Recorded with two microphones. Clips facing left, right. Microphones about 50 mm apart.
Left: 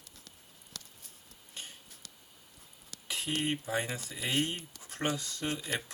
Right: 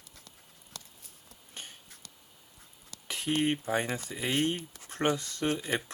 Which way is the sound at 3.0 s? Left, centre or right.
Right.